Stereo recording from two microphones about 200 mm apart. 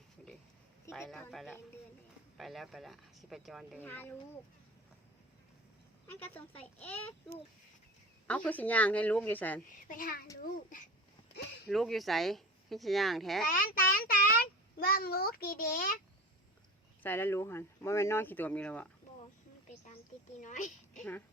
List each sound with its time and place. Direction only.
0.9 s speech: centre (ahead or behind)
3.8 s speech: 10° left (ahead or behind)
6.1 s speech: 10° left (ahead or behind)
9.8 s a child's voice: 45° left (ahead or behind)
11.7 s speech: centre (ahead or behind)
13.5 s a child's voice: 45° left (ahead or behind)
17.0 s speech: 10° left (ahead or behind)
20.4 s a child's voice: 40° left (ahead or behind)
21.0 s speech: 10° left (ahead or behind)